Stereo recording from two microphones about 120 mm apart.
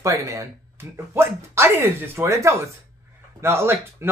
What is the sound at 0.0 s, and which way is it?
Speech, 25° right (ahead or behind).